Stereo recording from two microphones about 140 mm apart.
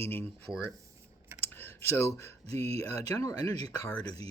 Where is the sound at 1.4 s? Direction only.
15° left (ahead or behind).